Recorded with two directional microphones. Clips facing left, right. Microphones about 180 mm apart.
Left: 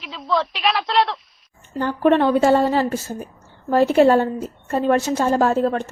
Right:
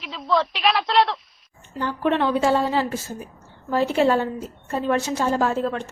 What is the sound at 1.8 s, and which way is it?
A woman's voice, 50° left (ahead or behind).